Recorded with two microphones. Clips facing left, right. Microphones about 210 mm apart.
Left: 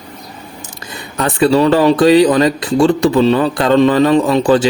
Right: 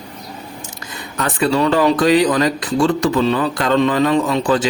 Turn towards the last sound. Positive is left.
turn(degrees=30)  # may be behind; listen again after turning